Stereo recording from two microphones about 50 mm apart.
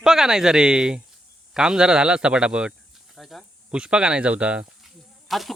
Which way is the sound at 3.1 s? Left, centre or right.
Centre.